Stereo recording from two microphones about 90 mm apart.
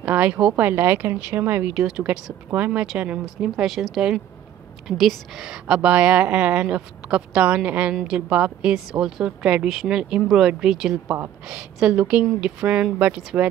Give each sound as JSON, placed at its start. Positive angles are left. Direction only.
{"t": 0.0, "sound": "speech", "side_deg": -15}
{"t": 1.7, "sound": "speech", "side_deg": -10}